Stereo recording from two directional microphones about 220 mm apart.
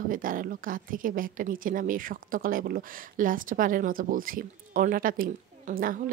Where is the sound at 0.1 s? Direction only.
40° right (ahead or behind).